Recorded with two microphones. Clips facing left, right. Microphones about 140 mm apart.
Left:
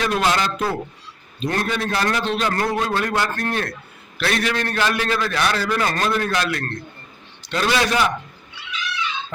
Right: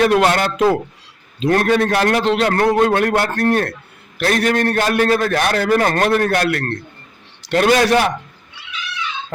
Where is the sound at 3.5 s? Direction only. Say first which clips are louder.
Right 7 dB; 50° right (ahead or behind); by 8.1 s 65° right (ahead or behind).